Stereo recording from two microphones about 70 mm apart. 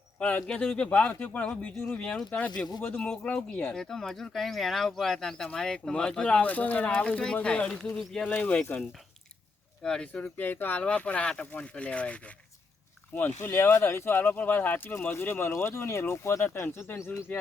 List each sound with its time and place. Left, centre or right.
0.2 s speech: centre
3.1 s speech: centre
9.8 s speech: centre
10.1 s speech: left
13.1 s speech: left